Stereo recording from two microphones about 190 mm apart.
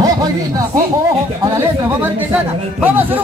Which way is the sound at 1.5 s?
10° right (ahead or behind).